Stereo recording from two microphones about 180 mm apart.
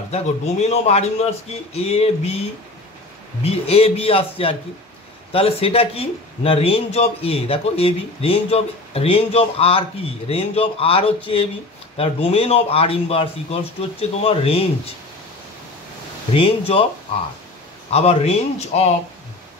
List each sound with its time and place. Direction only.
0.1 s speech: 35° left (ahead or behind)
3.4 s speech: 35° left (ahead or behind)
16.3 s speech: 30° left (ahead or behind)
17.9 s speech: 35° left (ahead or behind)